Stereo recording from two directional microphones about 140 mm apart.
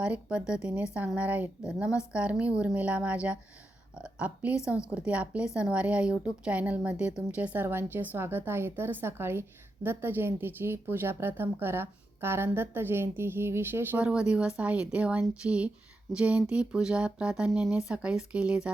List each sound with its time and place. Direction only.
0.0 s a woman's voice: 10° right (ahead or behind)